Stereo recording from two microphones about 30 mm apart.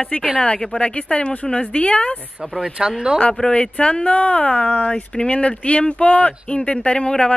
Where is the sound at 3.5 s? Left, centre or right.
Left.